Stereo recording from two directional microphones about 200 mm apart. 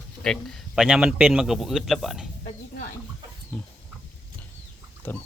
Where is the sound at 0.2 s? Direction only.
Centre (ahead or behind).